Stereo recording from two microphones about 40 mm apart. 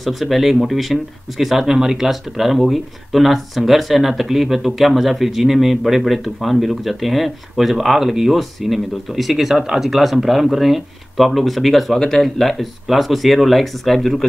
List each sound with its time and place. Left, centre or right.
0.0 s speech: centre